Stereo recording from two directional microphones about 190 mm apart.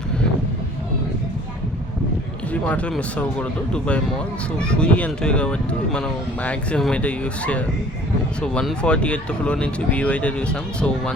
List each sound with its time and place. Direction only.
2.5 s speech: 10° left (ahead or behind)
4.5 s speech: 5° left (ahead or behind)